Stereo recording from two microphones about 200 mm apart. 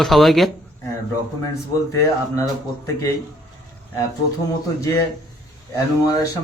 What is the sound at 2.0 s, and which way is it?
A man's voice, 15° left (ahead or behind).